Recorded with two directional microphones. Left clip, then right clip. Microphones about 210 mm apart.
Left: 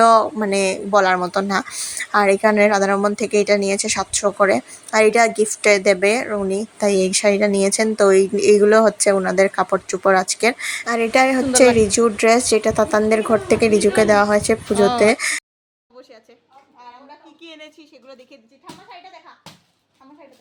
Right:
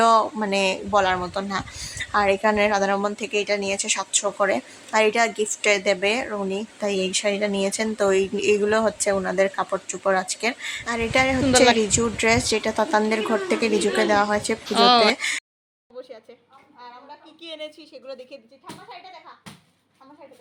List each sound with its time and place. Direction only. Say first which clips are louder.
0.0 s speech: left 5 dB; 15° left (ahead or behind)
1.7 s speech: left 5 dB; 15° left (ahead or behind)
14.8 s a woman's voice: right 2 dB; centre (ahead or behind)
15.0 s speech: left 4 dB; 20° left (ahead or behind)
17.4 s a woman's voice: right 5 dB; 5° right (ahead or behind)